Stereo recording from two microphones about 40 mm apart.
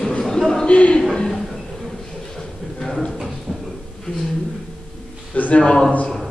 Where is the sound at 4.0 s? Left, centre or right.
Centre.